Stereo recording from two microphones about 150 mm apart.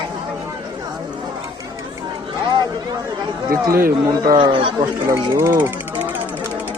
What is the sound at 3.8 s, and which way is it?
Speech, 70° right (ahead or behind).